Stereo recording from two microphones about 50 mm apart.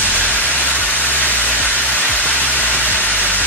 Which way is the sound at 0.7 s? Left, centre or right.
Left.